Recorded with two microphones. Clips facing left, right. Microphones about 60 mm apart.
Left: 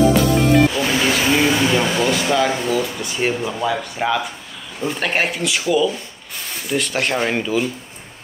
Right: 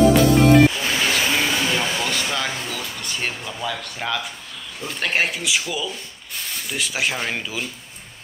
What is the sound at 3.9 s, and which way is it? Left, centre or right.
Speech, centre.